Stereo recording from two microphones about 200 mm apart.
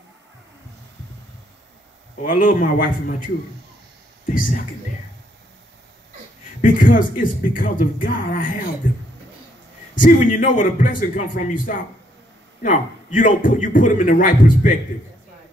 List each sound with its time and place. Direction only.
2.2 s a man's voice: 40° left (ahead or behind)
4.3 s speech: 45° left (ahead or behind)
6.6 s speech: 40° left (ahead or behind)
8.8 s a sound: 40° left (ahead or behind)
9.9 s a man's voice: 40° left (ahead or behind)